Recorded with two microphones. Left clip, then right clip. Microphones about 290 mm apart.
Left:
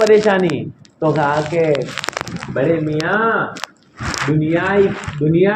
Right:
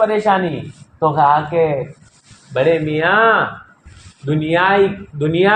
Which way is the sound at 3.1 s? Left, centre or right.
Right.